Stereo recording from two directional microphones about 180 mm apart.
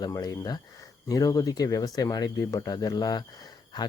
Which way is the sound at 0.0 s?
20° left (ahead or behind).